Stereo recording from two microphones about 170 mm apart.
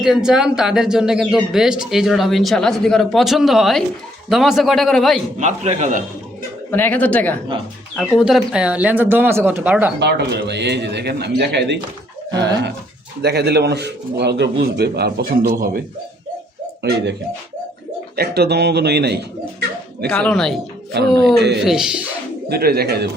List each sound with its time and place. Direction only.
0.0 s speech: 5° right (ahead or behind)
5.4 s a man's voice: 45° right (ahead or behind)
6.7 s speech: 10° left (ahead or behind)
8.1 s speech: centre (ahead or behind)
10.0 s a man's voice: 80° right
13.2 s a man's voice: 70° right (ahead or behind)
18.2 s a man's voice: 70° right (ahead or behind)
20.1 s speech: 5° left (ahead or behind)
20.9 s a man's voice: 80° right
21.6 s speech: 5° right (ahead or behind)
22.4 s a man's voice: 65° right (ahead or behind)